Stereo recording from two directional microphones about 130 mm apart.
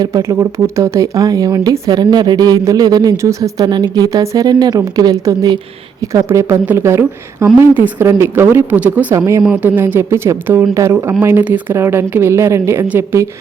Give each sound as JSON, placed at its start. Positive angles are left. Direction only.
{"t": 0.0, "sound": "a woman's voice", "side_deg": -25}